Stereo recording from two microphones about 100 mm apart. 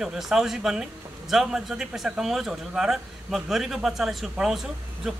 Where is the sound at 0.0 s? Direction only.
5° right (ahead or behind).